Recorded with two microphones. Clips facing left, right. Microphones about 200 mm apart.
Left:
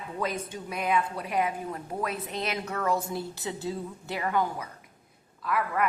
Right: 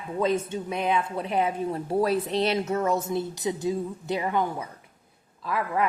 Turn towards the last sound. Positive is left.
turn(degrees=-25)  # may be behind; listen again after turning